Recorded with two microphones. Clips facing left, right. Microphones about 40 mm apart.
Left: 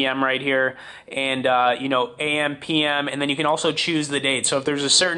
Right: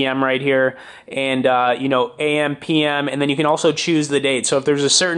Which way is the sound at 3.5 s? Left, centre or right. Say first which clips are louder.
Right 5 dB; left.